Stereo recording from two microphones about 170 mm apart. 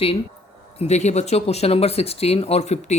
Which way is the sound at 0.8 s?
40° left (ahead or behind).